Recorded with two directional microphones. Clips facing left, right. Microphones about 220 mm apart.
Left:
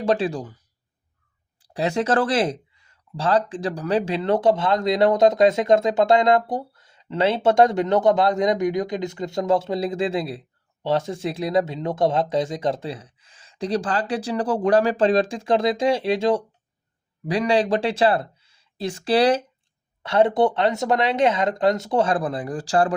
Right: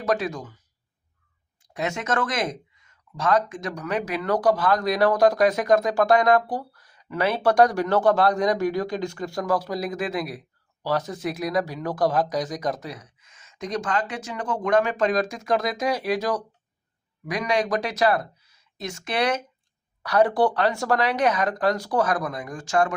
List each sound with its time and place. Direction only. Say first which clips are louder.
0.0 s speech: left 4 dB; 30° left (ahead or behind)
1.6 s speech: left 6 dB; 35° left (ahead or behind)